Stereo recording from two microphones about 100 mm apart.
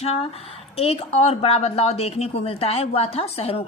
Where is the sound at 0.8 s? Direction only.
75° left (ahead or behind).